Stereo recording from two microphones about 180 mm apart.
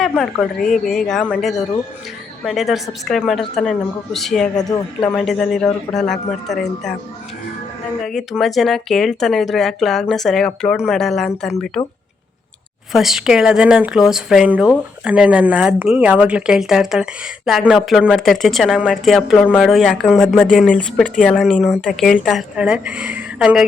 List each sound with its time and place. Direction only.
0.6 s speech: centre (ahead or behind)
4.5 s speech: 20° left (ahead or behind)
5.1 s speech: centre (ahead or behind)
8.0 s speech: centre (ahead or behind)
12.9 s speech: centre (ahead or behind)